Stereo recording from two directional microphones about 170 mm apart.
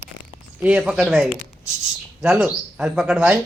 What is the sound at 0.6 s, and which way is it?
Speech, 5° right (ahead or behind).